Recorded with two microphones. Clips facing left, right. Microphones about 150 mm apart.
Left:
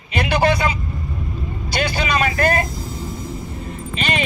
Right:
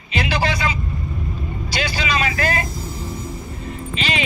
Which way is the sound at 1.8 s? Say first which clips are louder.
Left 3 dB; 55° left (ahead or behind).